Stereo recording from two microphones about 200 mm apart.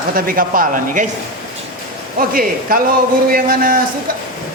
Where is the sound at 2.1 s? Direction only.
45° right (ahead or behind).